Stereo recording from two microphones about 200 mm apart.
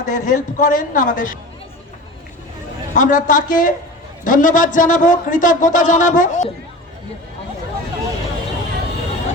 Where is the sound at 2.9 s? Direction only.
40° left (ahead or behind).